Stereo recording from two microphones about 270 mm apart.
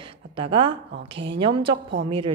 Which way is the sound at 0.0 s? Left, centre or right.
Centre.